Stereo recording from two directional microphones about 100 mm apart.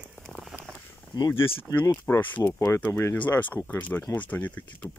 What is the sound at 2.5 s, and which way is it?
Speech, 30° left (ahead or behind).